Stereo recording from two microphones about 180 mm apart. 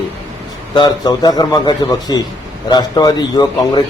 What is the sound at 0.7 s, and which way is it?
A man's voice, 20° left (ahead or behind).